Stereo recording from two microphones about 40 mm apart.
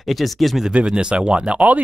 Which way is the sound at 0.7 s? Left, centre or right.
Right.